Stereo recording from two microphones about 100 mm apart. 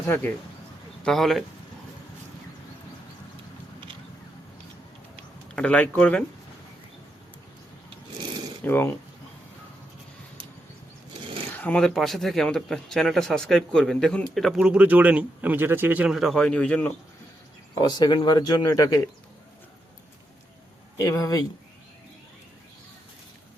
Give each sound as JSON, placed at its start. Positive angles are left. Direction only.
{"t": 1.0, "sound": "speech", "side_deg": 0}
{"t": 5.5, "sound": "speech", "side_deg": 10}
{"t": 8.6, "sound": "speech", "side_deg": 25}
{"t": 11.5, "sound": "speech", "side_deg": 15}
{"t": 11.9, "sound": "speech", "side_deg": 0}
{"t": 14.6, "sound": "a man's voice", "side_deg": -10}
{"t": 16.0, "sound": "speech", "side_deg": -5}
{"t": 17.7, "sound": "speech", "side_deg": 45}
{"t": 21.0, "sound": "speech", "side_deg": 35}